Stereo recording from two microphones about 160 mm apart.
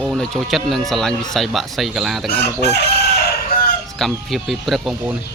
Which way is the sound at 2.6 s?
90° left.